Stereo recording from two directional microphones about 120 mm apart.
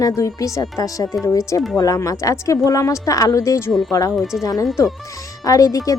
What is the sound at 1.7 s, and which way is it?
Speech, 30° left (ahead or behind).